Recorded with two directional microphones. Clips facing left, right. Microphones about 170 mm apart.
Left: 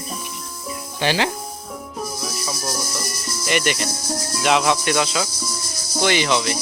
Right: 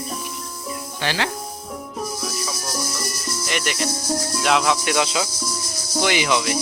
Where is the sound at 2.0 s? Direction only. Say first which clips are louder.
Even; centre (ahead or behind).